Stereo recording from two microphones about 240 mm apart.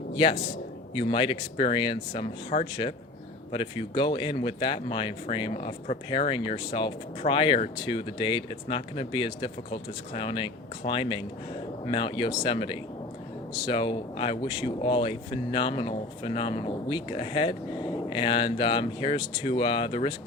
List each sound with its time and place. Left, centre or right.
0.1 s a man's voice: left